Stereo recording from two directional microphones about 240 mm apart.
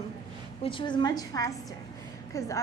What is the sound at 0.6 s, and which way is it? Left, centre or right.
A woman's voice, left.